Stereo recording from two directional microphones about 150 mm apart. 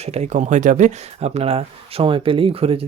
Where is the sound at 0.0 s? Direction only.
45° right (ahead or behind).